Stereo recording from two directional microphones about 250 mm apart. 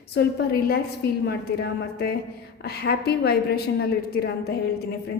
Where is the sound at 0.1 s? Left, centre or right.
Left.